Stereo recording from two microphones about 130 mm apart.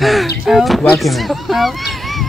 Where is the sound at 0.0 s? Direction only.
Centre (ahead or behind).